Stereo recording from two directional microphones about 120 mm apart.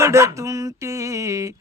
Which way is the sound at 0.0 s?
25° right (ahead or behind).